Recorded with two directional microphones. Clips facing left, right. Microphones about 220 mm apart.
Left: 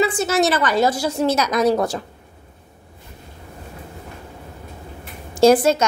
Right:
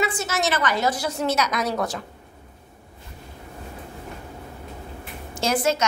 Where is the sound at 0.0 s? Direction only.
30° left (ahead or behind).